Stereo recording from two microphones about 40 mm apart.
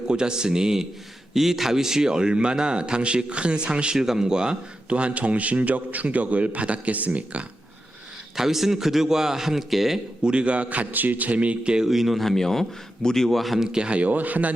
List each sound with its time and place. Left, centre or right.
0.1 s a man's voice: centre
3.9 s a man's voice: centre
4.9 s a man's voice: right
8.4 s a man's voice: centre
10.2 s a man's voice: right
11.9 s a man's voice: centre
12.2 s speech: centre
13.6 s a man's voice: centre; by 14.5 s right